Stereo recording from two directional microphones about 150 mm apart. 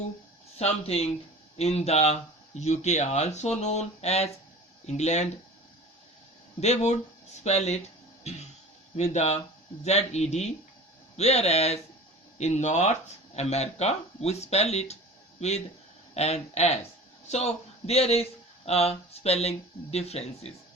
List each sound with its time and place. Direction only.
0.6 s speech: 45° left (ahead or behind)
6.6 s speech: 50° left (ahead or behind)
9.0 s speech: 50° left (ahead or behind)